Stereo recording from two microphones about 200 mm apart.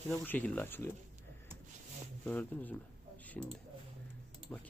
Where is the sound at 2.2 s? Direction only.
10° left (ahead or behind).